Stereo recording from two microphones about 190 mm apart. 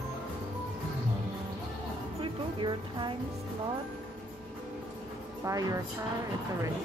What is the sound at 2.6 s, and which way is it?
Speech, 25° right (ahead or behind).